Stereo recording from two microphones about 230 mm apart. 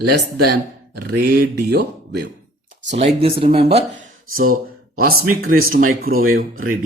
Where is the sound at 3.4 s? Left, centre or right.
Right.